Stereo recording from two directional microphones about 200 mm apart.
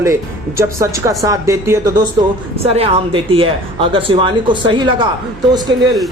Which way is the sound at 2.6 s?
30° right (ahead or behind).